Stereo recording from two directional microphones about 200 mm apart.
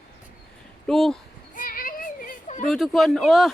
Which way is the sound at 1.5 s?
45° left (ahead or behind).